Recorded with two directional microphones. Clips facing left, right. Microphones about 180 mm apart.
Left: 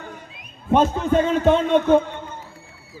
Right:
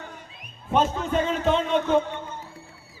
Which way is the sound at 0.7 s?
45° left (ahead or behind).